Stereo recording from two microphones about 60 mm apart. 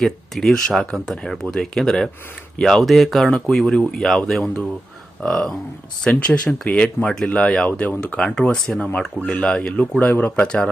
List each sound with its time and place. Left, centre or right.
0.0 s speech: centre
7.7 s speech: left
10.4 s speech: centre